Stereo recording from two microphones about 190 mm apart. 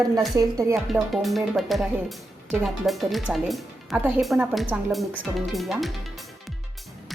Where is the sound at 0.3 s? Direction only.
20° right (ahead or behind).